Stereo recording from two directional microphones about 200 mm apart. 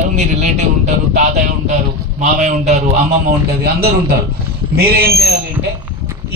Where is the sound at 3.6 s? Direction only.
50° right (ahead or behind).